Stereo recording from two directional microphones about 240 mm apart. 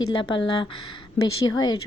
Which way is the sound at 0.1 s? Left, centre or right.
Centre.